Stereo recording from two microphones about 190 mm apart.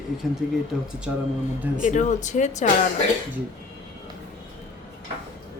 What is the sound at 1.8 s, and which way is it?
Speech, 40° left (ahead or behind).